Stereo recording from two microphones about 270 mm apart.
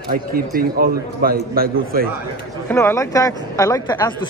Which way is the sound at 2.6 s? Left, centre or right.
Centre.